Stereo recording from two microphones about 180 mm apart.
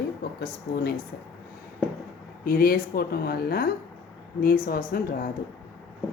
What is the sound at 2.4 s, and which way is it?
Speech, 55° left (ahead or behind).